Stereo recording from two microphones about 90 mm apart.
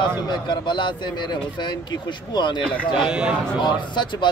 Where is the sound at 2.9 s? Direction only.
10° right (ahead or behind).